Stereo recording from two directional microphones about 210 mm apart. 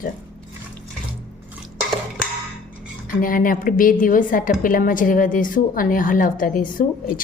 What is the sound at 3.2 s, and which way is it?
A woman's voice, 40° left (ahead or behind).